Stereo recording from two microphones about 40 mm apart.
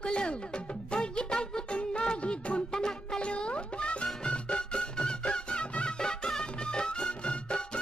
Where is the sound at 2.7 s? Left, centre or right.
Centre.